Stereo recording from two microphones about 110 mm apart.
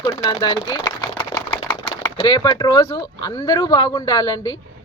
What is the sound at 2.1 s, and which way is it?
A man's voice, 35° left (ahead or behind).